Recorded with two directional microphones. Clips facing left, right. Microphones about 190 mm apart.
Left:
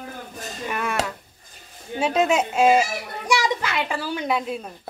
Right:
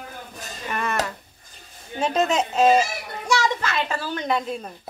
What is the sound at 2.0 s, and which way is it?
A woman's voice, 10° left (ahead or behind).